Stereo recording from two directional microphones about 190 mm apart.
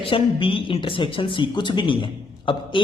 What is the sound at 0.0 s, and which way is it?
A man's voice, 30° left (ahead or behind).